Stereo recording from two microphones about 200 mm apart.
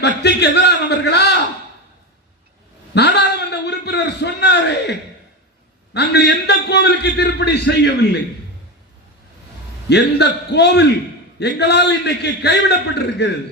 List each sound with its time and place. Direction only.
0.2 s a man's voice: 55° left (ahead or behind)
2.9 s a sound: 60° left (ahead or behind)
5.9 s a man's voice: 55° left (ahead or behind)
9.9 s a man's voice: 60° left (ahead or behind)